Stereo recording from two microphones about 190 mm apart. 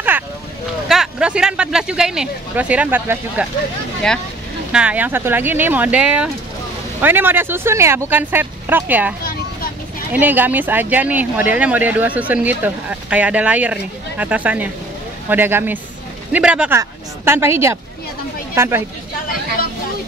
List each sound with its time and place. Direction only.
0.8 s speech: 5° right (ahead or behind)
4.7 s speech: 10° right (ahead or behind)
9.2 s children playing: 50° left (ahead or behind)
10.1 s speech: 10° right (ahead or behind)